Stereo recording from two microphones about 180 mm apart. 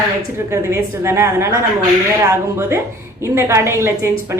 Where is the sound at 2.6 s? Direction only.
15° right (ahead or behind).